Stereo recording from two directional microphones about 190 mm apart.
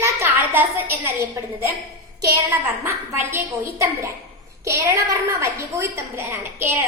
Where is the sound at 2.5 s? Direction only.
10° right (ahead or behind).